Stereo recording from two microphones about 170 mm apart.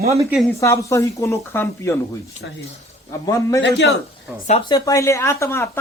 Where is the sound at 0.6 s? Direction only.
15° left (ahead or behind).